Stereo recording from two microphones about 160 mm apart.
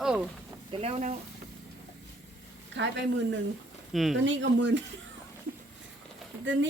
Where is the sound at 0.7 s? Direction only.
40° right (ahead or behind).